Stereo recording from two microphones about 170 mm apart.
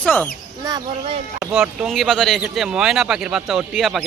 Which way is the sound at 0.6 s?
25° right (ahead or behind).